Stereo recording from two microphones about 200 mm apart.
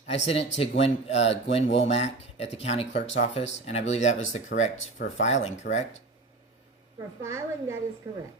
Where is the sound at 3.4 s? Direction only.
65° left (ahead or behind).